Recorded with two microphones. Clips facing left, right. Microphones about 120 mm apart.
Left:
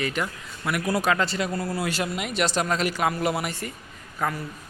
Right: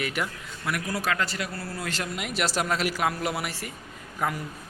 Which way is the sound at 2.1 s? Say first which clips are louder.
Even; centre (ahead or behind).